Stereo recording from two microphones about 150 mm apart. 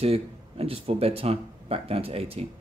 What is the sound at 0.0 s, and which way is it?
Speech, 40° right (ahead or behind).